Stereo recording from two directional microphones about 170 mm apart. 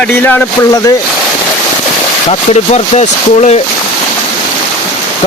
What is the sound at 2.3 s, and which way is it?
Speech, 40° left (ahead or behind).